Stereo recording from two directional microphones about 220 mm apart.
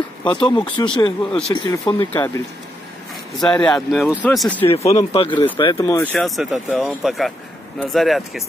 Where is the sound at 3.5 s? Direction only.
5° left (ahead or behind).